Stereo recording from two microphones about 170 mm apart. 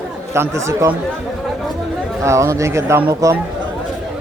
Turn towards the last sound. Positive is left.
turn(degrees=-20)  # may be behind; listen again after turning